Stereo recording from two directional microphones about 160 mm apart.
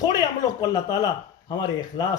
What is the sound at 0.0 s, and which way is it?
Speech, 25° left (ahead or behind).